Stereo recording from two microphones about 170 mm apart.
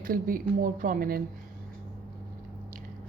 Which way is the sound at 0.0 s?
55° right (ahead or behind).